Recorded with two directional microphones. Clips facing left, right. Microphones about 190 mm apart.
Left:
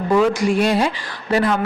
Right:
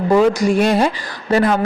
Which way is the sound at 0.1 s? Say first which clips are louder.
Right 3 dB; 40° right (ahead or behind).